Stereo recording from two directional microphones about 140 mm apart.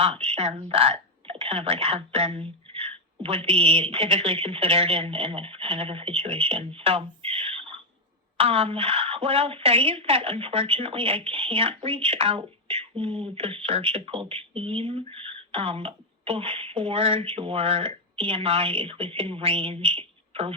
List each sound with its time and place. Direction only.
0.0 s a woman's voice: 40° right (ahead or behind)